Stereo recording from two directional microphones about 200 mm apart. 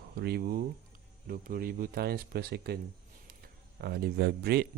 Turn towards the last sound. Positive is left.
turn(degrees=-55)  # may be behind; listen again after turning